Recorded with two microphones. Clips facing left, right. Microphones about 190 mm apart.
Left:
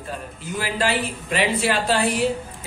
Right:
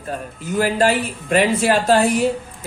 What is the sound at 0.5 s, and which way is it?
Speech, 45° right (ahead or behind).